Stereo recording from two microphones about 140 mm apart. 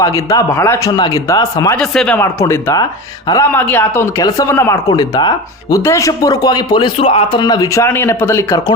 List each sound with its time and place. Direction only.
0.0 s speech: 25° left (ahead or behind)
1.8 s speech: 5° left (ahead or behind)
2.1 s speech: 20° left (ahead or behind)